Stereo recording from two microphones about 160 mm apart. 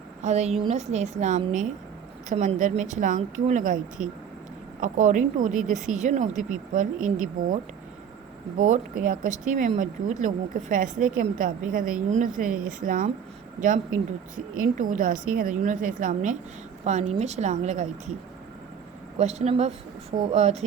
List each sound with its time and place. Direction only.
0.2 s speech: 45° right (ahead or behind)
8.6 s speech: 55° right (ahead or behind)
14.3 s a woman's voice: 55° right (ahead or behind)
19.2 s speech: 40° right (ahead or behind)